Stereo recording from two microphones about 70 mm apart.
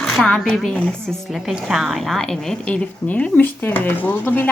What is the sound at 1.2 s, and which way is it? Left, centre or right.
A woman's voice, centre.